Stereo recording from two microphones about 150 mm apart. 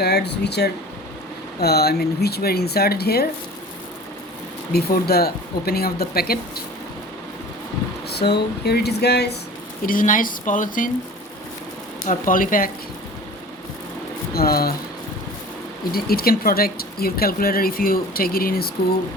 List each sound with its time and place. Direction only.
0.0 s speech: 90° left
4.7 s speech: 90° left
8.1 s speech: 90° left
9.8 s speech: 65° left (ahead or behind)
12.0 s speech: 65° left (ahead or behind)
14.3 s speech: 90° left
15.9 s speech: 90° left